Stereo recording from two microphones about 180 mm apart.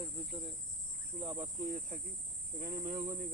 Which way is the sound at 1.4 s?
45° right (ahead or behind).